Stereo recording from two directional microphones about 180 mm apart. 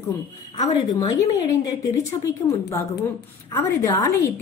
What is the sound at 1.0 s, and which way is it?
Speech, 20° left (ahead or behind).